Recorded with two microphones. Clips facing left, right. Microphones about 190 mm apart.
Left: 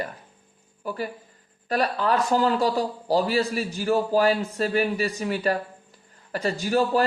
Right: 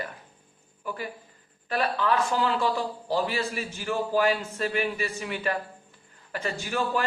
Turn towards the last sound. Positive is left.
turn(degrees=35)  # may be behind; listen again after turning